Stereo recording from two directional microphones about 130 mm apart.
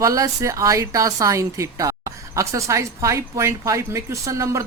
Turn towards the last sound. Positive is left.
turn(degrees=-25)  # may be behind; listen again after turning